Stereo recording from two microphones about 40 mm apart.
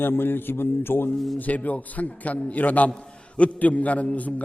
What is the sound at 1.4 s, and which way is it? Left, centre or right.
Speech, left.